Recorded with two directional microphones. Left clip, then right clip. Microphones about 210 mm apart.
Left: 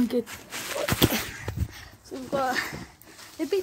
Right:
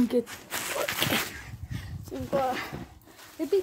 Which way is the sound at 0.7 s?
Centre (ahead or behind).